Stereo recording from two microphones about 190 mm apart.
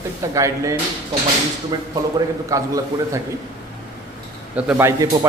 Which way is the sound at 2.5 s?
15° right (ahead or behind).